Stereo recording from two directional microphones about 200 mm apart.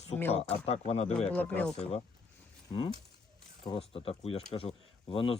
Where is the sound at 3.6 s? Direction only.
25° left (ahead or behind).